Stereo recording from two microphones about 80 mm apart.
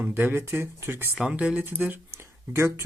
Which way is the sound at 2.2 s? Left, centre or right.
Right.